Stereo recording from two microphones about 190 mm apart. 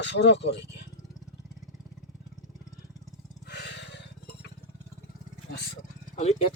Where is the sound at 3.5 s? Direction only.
60° left (ahead or behind).